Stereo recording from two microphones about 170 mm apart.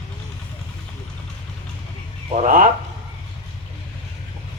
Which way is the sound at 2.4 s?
55° right (ahead or behind).